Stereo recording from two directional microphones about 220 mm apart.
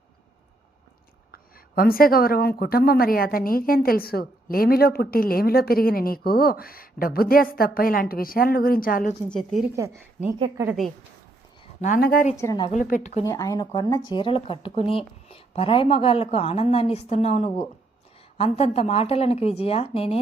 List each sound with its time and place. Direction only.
1.3 s speech: 40° left (ahead or behind)
9.3 s a woman's voice: centre (ahead or behind)
9.7 s speech: 15° right (ahead or behind)
10.7 s a woman's voice: centre (ahead or behind)
11.8 s speech: 40° left (ahead or behind)
12.4 s speech: 15° left (ahead or behind)
12.7 s speech: 35° left (ahead or behind)
13.2 s a woman's voice: 15° left (ahead or behind)